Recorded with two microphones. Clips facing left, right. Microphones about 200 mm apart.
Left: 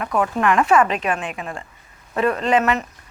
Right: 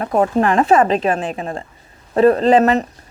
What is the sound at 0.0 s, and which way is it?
A woman's voice, 35° right (ahead or behind).